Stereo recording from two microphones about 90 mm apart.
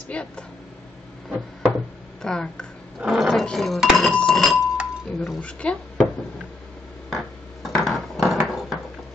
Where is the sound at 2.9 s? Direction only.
Centre (ahead or behind).